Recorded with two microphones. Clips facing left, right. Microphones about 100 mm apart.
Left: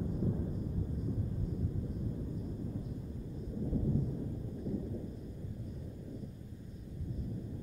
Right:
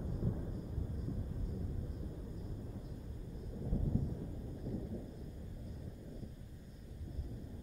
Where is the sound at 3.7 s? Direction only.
5° left (ahead or behind).